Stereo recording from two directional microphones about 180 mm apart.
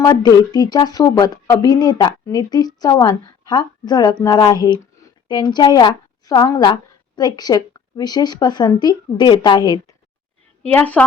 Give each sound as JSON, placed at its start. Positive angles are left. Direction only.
{"t": 0.0, "sound": "speech", "side_deg": 20}
{"t": 10.6, "sound": "a woman's voice", "side_deg": 5}